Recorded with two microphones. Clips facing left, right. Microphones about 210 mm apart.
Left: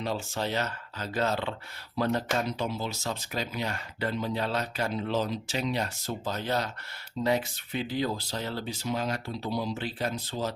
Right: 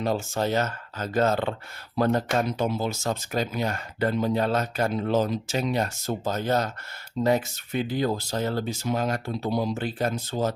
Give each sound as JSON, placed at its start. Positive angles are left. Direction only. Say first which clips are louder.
{"t": 0.0, "sound": "speech", "louder": "right 6 dB", "side_deg": -45}